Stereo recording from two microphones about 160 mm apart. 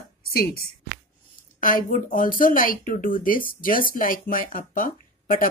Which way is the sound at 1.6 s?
60° left (ahead or behind).